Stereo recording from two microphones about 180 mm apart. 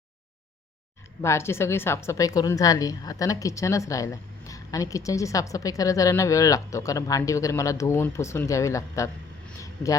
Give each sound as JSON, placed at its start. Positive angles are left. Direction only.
{"t": 1.2, "sound": "a woman's voice", "side_deg": 15}
{"t": 9.6, "sound": "vehicle", "side_deg": 15}